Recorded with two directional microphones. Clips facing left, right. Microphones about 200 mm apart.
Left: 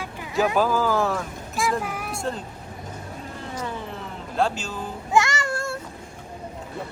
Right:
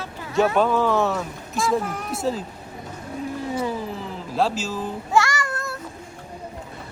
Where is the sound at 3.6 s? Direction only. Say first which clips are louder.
Right 5 dB; 5° right (ahead or behind).